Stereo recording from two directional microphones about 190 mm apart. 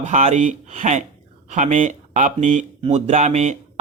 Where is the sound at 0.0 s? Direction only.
40° right (ahead or behind).